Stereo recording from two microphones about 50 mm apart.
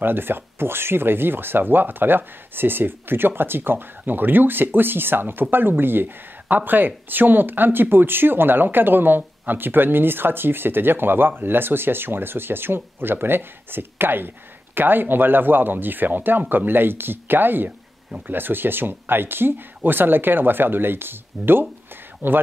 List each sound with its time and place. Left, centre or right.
0.0 s speech: right